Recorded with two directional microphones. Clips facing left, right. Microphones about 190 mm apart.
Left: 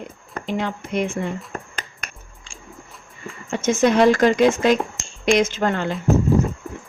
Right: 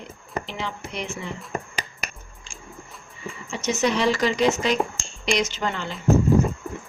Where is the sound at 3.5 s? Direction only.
50° left (ahead or behind).